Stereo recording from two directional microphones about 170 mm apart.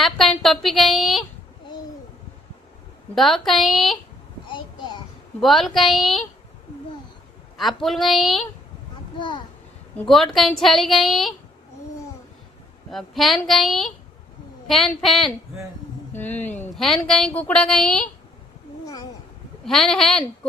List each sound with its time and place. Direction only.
0.0 s a sound: centre (ahead or behind)
3.2 s a woman's voice: centre (ahead or behind)
4.5 s a sound: 25° left (ahead or behind)
5.4 s a woman's voice: centre (ahead or behind)
7.5 s a woman's voice: centre (ahead or behind)
10.0 s a woman's voice: centre (ahead or behind)
12.9 s a woman's voice: centre (ahead or behind)
19.6 s a woman's voice: centre (ahead or behind)